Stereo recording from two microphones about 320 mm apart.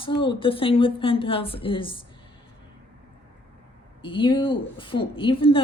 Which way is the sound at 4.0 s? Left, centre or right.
Centre.